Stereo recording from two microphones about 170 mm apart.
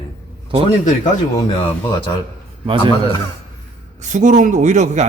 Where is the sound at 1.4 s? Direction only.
25° left (ahead or behind).